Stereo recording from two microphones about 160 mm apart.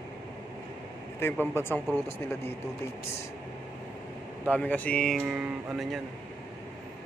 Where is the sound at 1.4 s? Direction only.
15° left (ahead or behind).